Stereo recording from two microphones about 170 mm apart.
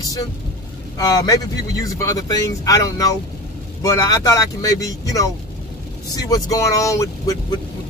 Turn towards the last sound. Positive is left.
turn(degrees=20)  # may be behind; listen again after turning